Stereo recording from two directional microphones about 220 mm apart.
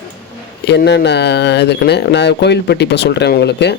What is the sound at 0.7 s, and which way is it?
Speech, 50° left (ahead or behind).